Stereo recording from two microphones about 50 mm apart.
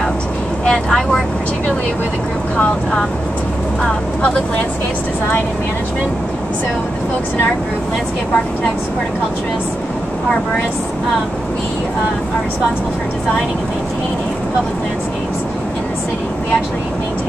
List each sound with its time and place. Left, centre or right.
0.7 s speech: centre